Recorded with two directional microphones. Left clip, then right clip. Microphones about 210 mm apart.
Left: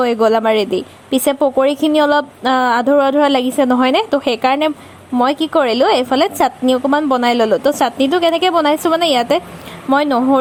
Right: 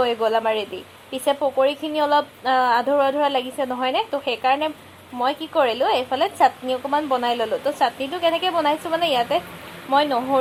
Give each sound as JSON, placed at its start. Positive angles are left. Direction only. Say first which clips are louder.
{"t": 0.0, "sound": "a woman's voice", "louder": "left 7 dB", "side_deg": 45}